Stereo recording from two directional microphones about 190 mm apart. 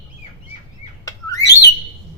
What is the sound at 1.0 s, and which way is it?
Bird, 15° left (ahead or behind).